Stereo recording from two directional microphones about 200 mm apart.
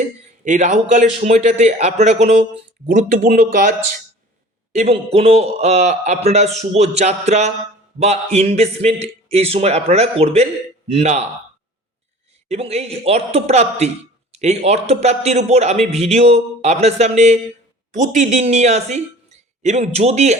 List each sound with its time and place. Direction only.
0.4 s a man's voice: 40° right (ahead or behind)
4.7 s a man's voice: 30° right (ahead or behind)
12.5 s a man's voice: 30° right (ahead or behind)